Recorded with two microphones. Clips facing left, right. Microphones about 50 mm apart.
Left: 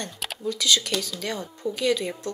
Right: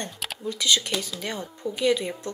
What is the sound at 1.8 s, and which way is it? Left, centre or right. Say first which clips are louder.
Speech: right 1 dB; centre.